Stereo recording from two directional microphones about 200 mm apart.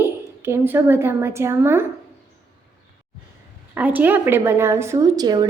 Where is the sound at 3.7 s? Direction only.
10° right (ahead or behind).